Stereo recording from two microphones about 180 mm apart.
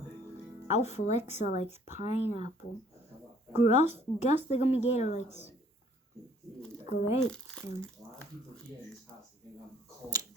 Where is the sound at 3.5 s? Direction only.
40° left (ahead or behind).